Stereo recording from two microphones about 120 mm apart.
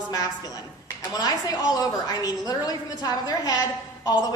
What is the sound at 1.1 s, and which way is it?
A woman's voice, 30° left (ahead or behind).